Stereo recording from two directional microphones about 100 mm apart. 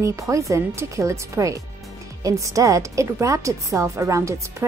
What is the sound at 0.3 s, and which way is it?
A woman's voice, 30° right (ahead or behind).